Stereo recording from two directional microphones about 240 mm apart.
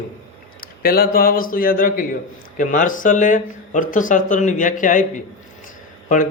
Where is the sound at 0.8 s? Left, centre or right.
Left.